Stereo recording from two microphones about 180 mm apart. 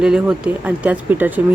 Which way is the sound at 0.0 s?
5° right (ahead or behind).